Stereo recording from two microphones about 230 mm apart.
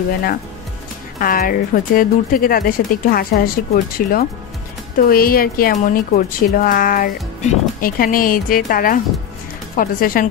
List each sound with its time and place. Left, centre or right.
1.2 s a woman's voice: left